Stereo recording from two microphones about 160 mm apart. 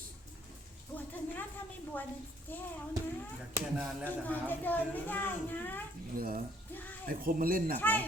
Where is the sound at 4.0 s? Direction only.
10° left (ahead or behind).